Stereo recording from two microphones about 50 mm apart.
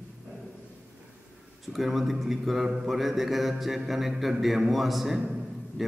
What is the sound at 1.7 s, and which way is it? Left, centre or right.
A man's voice, centre.